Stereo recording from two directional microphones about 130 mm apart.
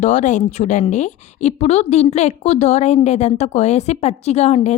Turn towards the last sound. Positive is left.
turn(degrees=55)  # may be behind; listen again after turning